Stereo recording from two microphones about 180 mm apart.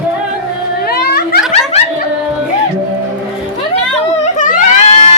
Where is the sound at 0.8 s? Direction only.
60° left (ahead or behind).